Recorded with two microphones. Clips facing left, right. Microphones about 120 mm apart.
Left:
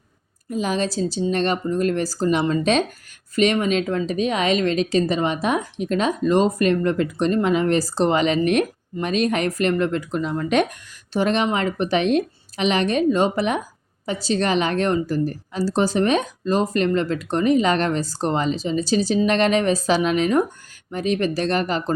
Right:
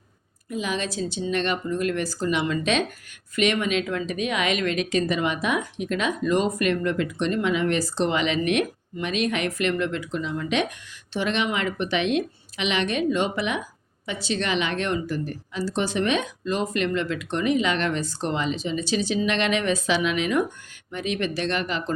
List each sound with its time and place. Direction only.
0.5 s speech: 40° left (ahead or behind)